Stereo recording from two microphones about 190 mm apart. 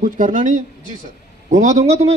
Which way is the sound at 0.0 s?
40° right (ahead or behind).